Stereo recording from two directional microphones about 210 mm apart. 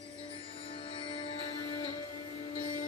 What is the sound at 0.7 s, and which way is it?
Music, 25° left (ahead or behind).